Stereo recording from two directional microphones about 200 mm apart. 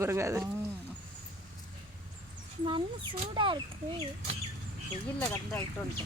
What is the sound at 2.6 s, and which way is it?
Speech, 25° right (ahead or behind).